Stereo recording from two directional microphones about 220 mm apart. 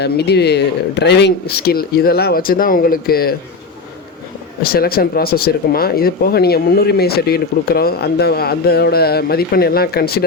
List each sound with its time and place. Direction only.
0.0 s speech: 50° left (ahead or behind)
4.6 s speech: 45° left (ahead or behind)